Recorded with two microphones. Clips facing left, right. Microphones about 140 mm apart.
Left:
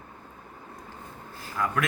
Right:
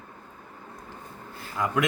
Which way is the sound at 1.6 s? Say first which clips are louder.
Right 1 dB; 15° right (ahead or behind).